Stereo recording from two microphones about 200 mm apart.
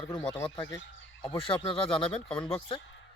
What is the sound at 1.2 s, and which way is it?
Speech, 25° left (ahead or behind).